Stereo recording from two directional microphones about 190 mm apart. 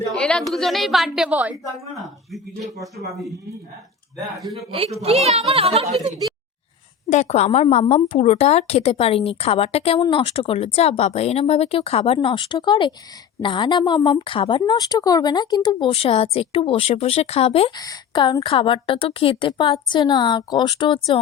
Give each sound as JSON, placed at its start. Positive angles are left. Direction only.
{"t": 0.1, "sound": "a woman's voice", "side_deg": 5}
{"t": 4.5, "sound": "speech", "side_deg": -30}
{"t": 7.1, "sound": "a woman's voice", "side_deg": 35}